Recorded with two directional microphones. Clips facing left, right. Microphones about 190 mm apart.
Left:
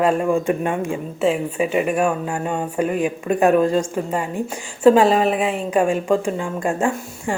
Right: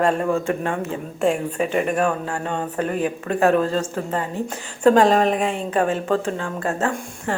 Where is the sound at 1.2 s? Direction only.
5° left (ahead or behind).